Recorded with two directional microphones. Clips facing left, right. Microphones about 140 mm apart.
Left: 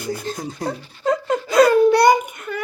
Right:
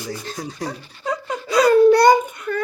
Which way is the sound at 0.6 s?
50° left (ahead or behind).